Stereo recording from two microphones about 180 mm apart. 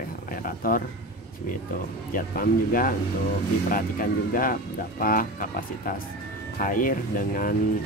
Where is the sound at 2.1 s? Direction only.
50° left (ahead or behind).